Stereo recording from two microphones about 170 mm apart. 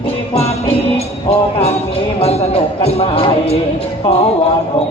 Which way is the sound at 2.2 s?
35° left (ahead or behind).